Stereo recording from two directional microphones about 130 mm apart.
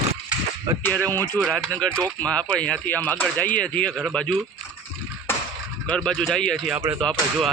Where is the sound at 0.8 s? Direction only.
15° left (ahead or behind).